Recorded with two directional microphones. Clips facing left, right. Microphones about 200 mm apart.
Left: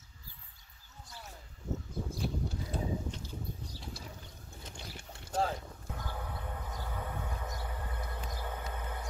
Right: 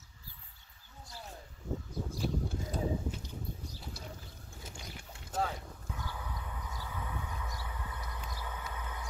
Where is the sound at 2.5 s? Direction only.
45° right (ahead or behind).